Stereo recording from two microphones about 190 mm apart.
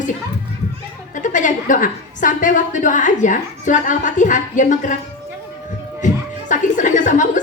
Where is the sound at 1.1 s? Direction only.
40° left (ahead or behind).